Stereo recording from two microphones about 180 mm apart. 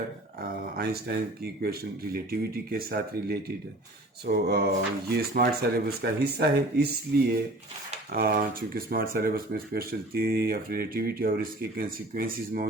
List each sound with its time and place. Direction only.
0.4 s speech: 60° right (ahead or behind)
2.3 s speech: 60° right (ahead or behind)